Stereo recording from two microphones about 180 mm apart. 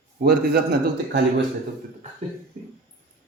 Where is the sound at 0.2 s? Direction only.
65° right (ahead or behind).